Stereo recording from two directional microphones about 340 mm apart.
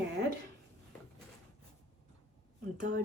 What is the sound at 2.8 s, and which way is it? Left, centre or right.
Speech, right.